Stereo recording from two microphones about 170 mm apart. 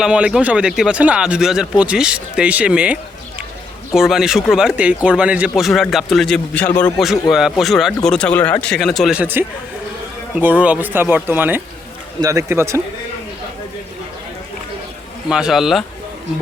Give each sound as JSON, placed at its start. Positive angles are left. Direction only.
{"t": 0.0, "sound": "speech", "side_deg": -5}
{"t": 15.3, "sound": "speech", "side_deg": -5}